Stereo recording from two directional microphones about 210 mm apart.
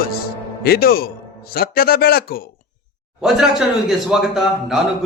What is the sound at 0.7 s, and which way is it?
A man's voice, 45° left (ahead or behind).